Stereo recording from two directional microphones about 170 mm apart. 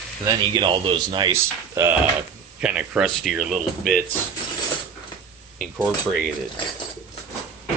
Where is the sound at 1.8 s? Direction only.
15° right (ahead or behind).